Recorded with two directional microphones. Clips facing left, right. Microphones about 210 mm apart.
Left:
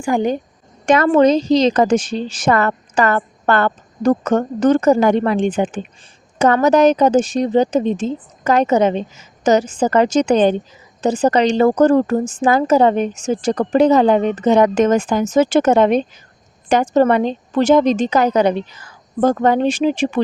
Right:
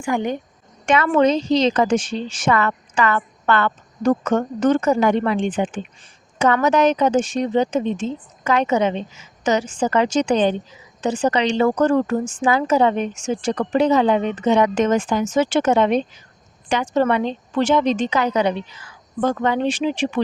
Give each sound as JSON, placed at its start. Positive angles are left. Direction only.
{"t": 0.0, "sound": "a woman's voice", "side_deg": 35}